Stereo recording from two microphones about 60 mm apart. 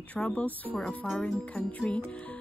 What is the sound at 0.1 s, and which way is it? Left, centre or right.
Speech, left.